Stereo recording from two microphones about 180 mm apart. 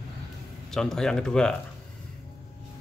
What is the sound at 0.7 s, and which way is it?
Speech, 5° left (ahead or behind).